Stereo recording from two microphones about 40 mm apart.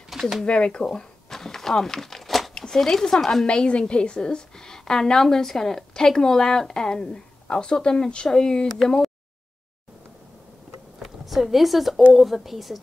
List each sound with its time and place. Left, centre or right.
0.1 s a sound: centre
0.5 s speech: left
0.9 s a sound: centre
2.5 s speech: centre
3.6 s a woman's voice: left
11.0 s speech: centre